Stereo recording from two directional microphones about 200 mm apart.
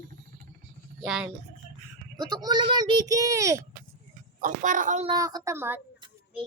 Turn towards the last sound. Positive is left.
turn(degrees=-10)  # may be behind; listen again after turning